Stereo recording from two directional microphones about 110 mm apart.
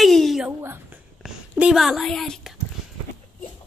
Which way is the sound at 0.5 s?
20° right (ahead or behind).